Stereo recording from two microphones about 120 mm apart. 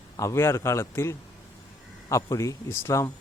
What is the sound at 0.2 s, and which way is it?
Speech, 25° left (ahead or behind).